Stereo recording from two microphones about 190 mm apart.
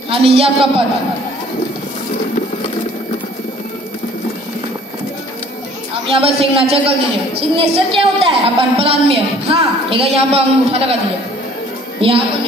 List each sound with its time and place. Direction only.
0.1 s a woman's voice: 30° right (ahead or behind)
6.0 s a woman's voice: 30° right (ahead or behind)